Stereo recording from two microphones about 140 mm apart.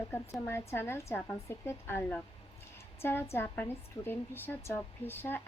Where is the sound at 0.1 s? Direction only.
15° left (ahead or behind).